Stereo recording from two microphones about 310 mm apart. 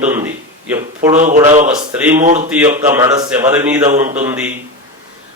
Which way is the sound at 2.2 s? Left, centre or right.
Right.